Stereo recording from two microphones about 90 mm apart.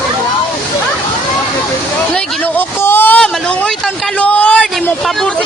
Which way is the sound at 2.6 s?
20° left (ahead or behind).